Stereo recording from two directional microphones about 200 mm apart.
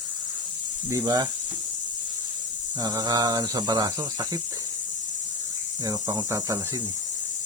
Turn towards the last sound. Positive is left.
turn(degrees=-15)  # may be behind; listen again after turning